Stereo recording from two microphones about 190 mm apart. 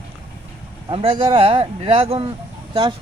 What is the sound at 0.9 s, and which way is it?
Speech, 30° right (ahead or behind).